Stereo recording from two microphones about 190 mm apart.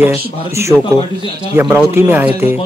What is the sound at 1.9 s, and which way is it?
Speech, 10° right (ahead or behind).